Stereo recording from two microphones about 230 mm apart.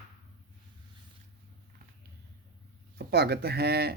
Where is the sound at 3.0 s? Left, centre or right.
Right.